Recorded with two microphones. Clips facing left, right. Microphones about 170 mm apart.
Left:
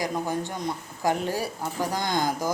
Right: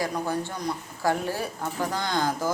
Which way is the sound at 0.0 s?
15° left (ahead or behind).